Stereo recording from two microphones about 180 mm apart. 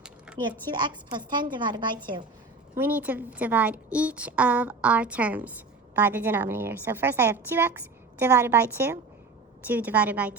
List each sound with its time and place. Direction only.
0.7 s a woman's voice: 25° right (ahead or behind)
2.7 s a woman's voice: 10° right (ahead or behind)